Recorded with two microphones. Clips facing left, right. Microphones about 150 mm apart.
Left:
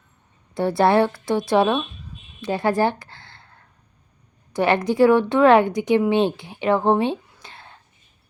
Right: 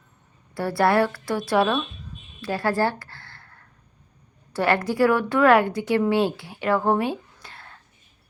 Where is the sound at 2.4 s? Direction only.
20° left (ahead or behind).